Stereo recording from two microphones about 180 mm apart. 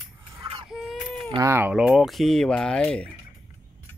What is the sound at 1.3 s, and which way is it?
Speech, 15° right (ahead or behind).